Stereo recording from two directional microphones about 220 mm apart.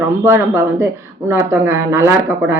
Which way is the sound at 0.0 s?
10° right (ahead or behind).